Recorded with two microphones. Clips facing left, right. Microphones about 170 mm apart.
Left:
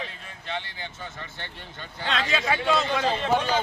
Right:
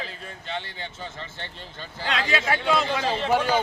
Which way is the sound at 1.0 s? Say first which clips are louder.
Right 2 dB; 30° right (ahead or behind).